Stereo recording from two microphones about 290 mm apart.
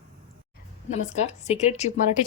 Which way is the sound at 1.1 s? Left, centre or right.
Left.